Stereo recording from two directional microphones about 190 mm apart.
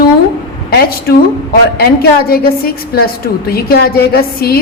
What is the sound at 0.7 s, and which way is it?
A woman's voice, 55° left (ahead or behind).